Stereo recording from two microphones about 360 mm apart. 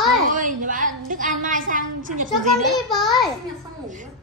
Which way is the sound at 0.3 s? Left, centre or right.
Right.